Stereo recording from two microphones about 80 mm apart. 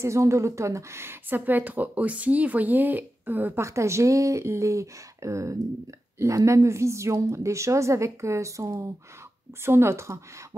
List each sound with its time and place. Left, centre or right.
0.0 s a woman's voice: right
3.6 s a woman's voice: right